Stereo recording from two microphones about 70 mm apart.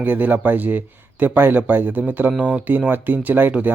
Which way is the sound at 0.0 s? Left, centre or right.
Right.